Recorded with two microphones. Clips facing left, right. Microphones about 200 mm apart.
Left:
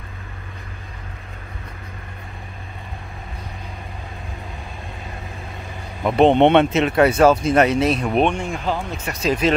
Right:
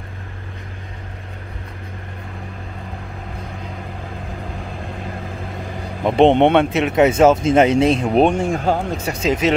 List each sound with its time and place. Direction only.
6.0 s speech: 25° right (ahead or behind)
6.4 s speech: 10° right (ahead or behind); by 8.3 s 30° right (ahead or behind)
8.3 s speech: 40° right (ahead or behind)
9.0 s speech: 25° right (ahead or behind)